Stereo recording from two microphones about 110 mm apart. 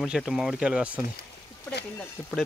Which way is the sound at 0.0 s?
5° right (ahead or behind).